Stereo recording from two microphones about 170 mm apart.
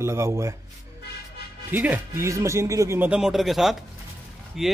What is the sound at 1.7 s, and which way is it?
Speech, 10° right (ahead or behind).